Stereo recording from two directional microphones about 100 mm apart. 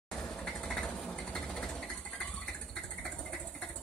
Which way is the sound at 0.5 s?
10° left (ahead or behind).